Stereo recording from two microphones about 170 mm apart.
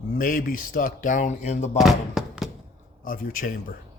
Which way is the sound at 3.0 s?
55° left (ahead or behind).